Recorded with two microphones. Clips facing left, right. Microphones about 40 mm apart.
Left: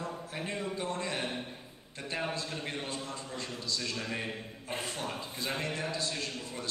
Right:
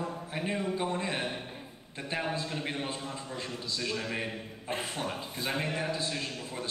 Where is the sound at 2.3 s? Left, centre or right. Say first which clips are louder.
Right 3 dB; centre.